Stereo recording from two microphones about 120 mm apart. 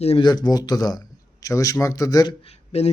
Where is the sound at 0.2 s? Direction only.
35° left (ahead or behind).